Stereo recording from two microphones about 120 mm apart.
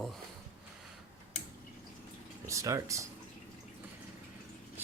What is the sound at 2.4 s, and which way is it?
Speech, 25° right (ahead or behind).